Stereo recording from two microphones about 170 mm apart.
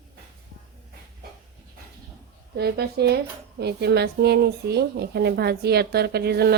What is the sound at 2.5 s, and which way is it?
Speech, 70° right (ahead or behind).